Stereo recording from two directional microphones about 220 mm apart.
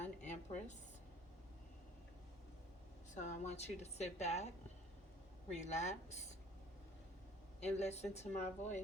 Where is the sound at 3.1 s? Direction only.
35° left (ahead or behind).